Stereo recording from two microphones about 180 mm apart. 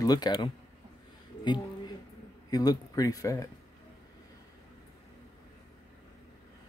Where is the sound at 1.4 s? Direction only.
25° left (ahead or behind).